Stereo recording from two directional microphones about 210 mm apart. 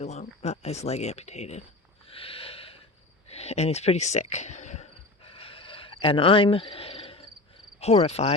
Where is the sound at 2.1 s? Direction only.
25° left (ahead or behind).